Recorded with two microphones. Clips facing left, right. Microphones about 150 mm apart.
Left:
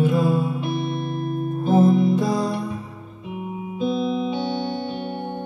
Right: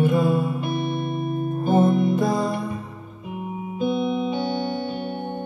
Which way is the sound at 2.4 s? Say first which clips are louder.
Even; centre (ahead or behind).